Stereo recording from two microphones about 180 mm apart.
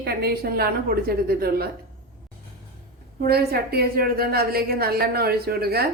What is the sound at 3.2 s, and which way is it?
A woman's voice, 60° right (ahead or behind).